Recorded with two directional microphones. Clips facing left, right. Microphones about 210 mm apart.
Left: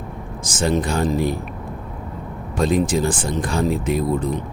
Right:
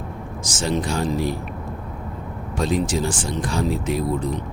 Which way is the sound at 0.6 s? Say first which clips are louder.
Left 3 dB; 55° left (ahead or behind).